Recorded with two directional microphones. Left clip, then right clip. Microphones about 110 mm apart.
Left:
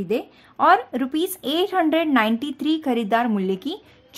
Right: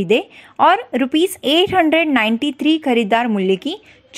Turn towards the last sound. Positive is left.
turn(degrees=-20)  # may be behind; listen again after turning